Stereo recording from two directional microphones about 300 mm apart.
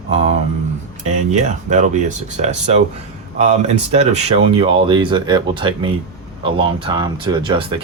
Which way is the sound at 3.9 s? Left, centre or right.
Right.